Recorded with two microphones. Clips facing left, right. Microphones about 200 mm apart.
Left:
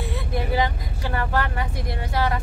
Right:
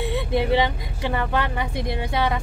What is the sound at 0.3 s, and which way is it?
Speech, 25° right (ahead or behind).